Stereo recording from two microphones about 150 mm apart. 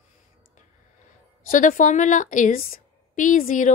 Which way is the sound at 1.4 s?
60° left (ahead or behind).